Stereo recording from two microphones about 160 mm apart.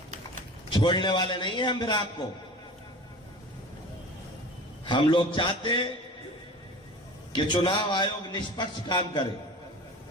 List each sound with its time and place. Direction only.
0.7 s a man's voice: 30° left (ahead or behind)
4.9 s a man's voice: 30° left (ahead or behind)
7.3 s a man's voice: 30° left (ahead or behind)